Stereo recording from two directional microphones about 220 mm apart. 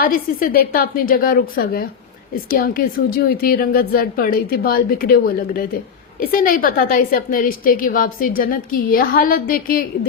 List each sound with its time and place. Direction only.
0.0 s a woman's voice: 40° left (ahead or behind)